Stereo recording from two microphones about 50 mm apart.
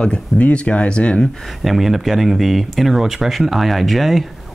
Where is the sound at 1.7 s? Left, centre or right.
Centre.